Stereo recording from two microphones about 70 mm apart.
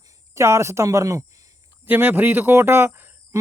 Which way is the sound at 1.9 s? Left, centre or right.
Right.